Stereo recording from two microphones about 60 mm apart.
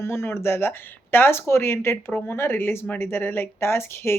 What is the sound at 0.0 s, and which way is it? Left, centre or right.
Speech, left.